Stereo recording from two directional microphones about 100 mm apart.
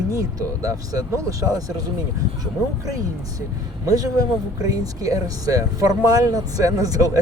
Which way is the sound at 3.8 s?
35° right (ahead or behind).